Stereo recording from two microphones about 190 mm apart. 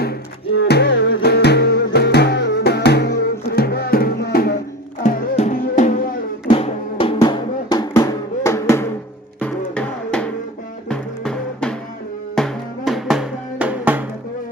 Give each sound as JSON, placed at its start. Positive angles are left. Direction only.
{"t": 0.5, "sound": "music", "side_deg": 75}
{"t": 5.0, "sound": "music", "side_deg": 45}
{"t": 6.5, "sound": "drum", "side_deg": 30}
{"t": 9.7, "sound": "music", "side_deg": 5}